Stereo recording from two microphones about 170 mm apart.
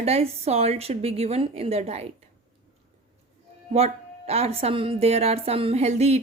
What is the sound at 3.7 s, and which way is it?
A woman's voice, 35° right (ahead or behind).